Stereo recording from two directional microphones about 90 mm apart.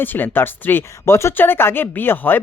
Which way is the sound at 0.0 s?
20° left (ahead or behind).